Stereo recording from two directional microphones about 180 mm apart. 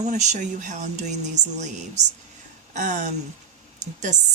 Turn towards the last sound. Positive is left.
turn(degrees=-40)  # may be behind; listen again after turning